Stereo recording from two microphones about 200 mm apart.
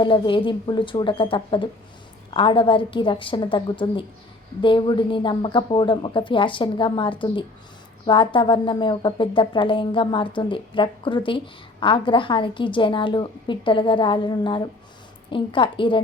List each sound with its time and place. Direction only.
0.0 s speech: 25° left (ahead or behind)